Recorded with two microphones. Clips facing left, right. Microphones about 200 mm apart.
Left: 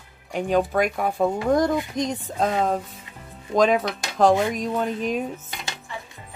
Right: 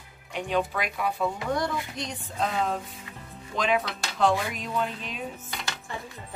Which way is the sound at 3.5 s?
40° left (ahead or behind).